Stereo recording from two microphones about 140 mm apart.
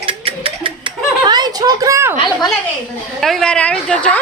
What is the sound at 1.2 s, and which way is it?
Speech, 30° right (ahead or behind).